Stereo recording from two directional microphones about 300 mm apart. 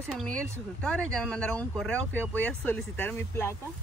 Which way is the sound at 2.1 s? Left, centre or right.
Centre.